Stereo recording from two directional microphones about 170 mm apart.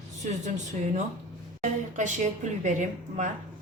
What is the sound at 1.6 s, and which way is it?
A woman's voice, 45° right (ahead or behind).